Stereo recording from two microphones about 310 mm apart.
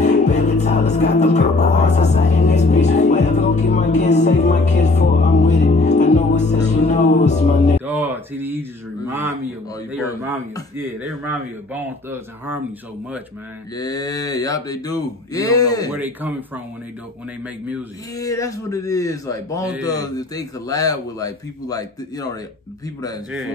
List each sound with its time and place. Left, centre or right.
0.0 s music: left
7.8 s a sound: centre
9.8 s a man's voice: centre
13.7 s a man's voice: centre
15.9 s speech: centre
18.1 s a man's voice: centre